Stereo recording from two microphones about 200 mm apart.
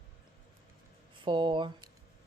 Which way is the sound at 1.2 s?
25° right (ahead or behind).